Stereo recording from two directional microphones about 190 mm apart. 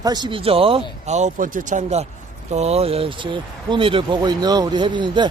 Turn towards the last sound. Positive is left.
turn(degrees=-25)  # may be behind; listen again after turning